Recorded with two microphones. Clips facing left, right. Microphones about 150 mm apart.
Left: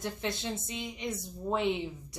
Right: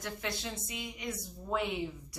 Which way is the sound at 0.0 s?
25° left (ahead or behind).